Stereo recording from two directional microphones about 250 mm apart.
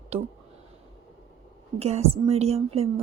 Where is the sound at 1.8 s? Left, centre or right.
Right.